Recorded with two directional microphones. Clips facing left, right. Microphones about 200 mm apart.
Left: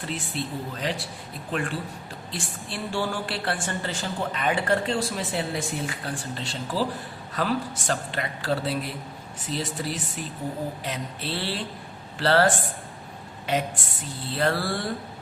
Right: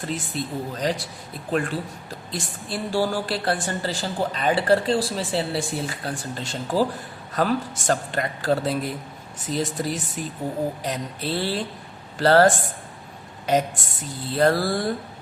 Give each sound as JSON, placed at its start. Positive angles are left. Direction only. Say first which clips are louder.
{"t": 0.3, "sound": "a woman's voice", "louder": "right 2 dB", "side_deg": -40}
{"t": 13.5, "sound": "a woman's voice", "louder": "right 5 dB", "side_deg": -40}